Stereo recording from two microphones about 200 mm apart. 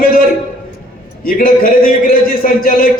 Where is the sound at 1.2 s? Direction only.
45° left (ahead or behind).